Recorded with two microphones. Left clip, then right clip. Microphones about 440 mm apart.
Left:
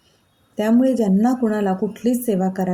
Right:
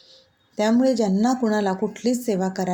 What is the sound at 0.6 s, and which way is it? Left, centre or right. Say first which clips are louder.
Speech: left 2 dB; left.